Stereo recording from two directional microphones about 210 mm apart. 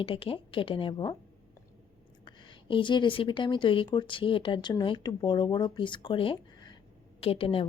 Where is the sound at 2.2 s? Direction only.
20° left (ahead or behind).